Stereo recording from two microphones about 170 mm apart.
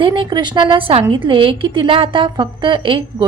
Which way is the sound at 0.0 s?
30° right (ahead or behind).